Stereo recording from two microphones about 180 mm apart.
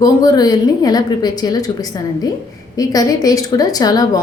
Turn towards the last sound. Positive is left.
turn(degrees=20)  # may be behind; listen again after turning